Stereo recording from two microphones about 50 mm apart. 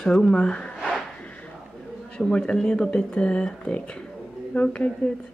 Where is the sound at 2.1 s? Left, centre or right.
Centre.